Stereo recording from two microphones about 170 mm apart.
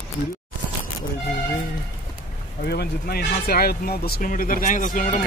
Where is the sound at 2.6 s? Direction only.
70° left (ahead or behind).